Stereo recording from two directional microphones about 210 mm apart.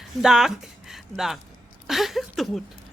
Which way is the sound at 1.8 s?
Centre (ahead or behind).